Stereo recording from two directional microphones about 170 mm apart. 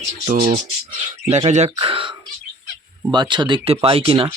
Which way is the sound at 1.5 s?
40° right (ahead or behind).